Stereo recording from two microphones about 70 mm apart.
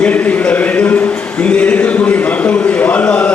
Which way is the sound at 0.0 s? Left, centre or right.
Left.